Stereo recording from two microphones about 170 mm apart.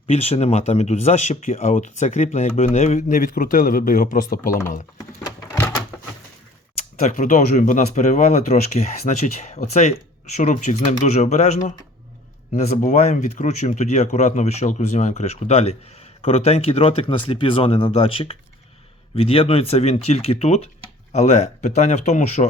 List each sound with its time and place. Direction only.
0.1 s speech: 40° left (ahead or behind); by 4.5 s 55° left (ahead or behind)
4.9 s a sound: 20° left (ahead or behind)
7.0 s speech: 45° left (ahead or behind)